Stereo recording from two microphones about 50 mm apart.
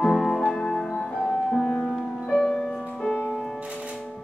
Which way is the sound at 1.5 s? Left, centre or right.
Centre.